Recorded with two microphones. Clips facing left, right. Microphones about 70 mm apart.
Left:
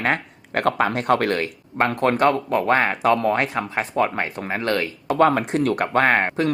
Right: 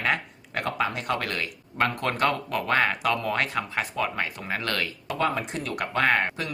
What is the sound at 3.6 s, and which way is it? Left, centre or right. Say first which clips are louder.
Speech: left 6 dB; left.